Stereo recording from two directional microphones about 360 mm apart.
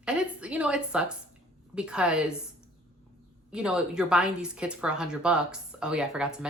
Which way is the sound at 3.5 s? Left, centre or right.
Centre.